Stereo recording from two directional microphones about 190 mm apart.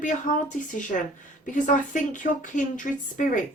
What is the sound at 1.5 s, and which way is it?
Speech, 40° left (ahead or behind).